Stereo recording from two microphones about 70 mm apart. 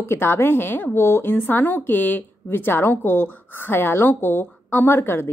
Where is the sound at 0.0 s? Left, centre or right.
Left.